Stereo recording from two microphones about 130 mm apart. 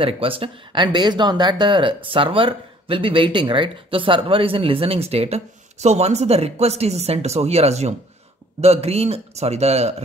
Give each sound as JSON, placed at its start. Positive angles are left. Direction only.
{"t": 0.0, "sound": "a man's voice", "side_deg": -45}